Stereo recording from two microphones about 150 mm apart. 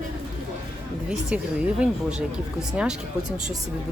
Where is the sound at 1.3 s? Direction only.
10° right (ahead or behind).